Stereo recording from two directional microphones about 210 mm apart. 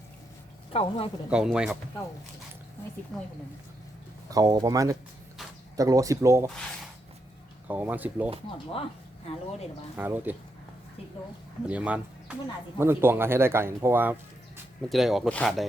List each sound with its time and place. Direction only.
0.7 s speech: 25° left (ahead or behind)
1.3 s speech: 5° right (ahead or behind)
3.1 s speech: centre (ahead or behind)
4.3 s speech: 15° right (ahead or behind)
7.7 s speech: 10° right (ahead or behind)
10.0 s speech: 10° right (ahead or behind)
11.6 s speech: 5° right (ahead or behind)